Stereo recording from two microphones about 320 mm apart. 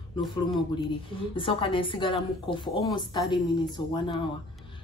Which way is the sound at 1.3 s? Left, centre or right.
Centre.